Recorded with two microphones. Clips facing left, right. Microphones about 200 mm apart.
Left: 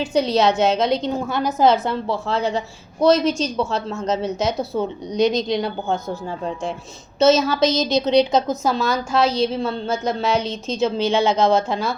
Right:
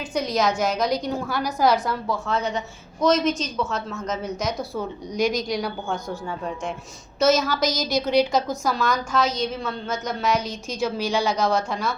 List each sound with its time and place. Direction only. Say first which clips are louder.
0.0 s a woman's voice: left 5 dB; 30° left (ahead or behind)
6.2 s a woman's voice: left 3 dB; 35° left (ahead or behind)